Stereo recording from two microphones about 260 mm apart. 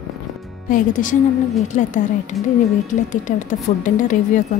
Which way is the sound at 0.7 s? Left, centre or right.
Left.